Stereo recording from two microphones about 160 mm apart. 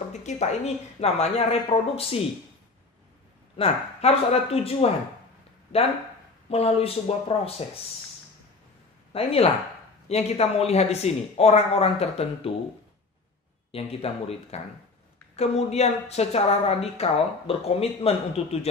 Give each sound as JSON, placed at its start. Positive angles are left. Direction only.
{"t": 0.1, "sound": "a sound", "side_deg": 45}
{"t": 1.0, "sound": "a woman's voice", "side_deg": 40}
{"t": 3.5, "sound": "a woman's voice", "side_deg": 40}
{"t": 6.5, "sound": "a woman's voice", "side_deg": 40}
{"t": 9.1, "sound": "a woman's voice", "side_deg": 35}
{"t": 13.7, "sound": "a woman's voice", "side_deg": 35}